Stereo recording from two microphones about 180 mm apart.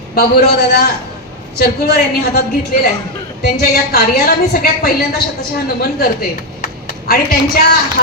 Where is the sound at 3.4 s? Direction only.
60° left (ahead or behind).